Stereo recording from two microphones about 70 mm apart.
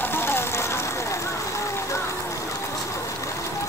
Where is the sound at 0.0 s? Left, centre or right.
Left.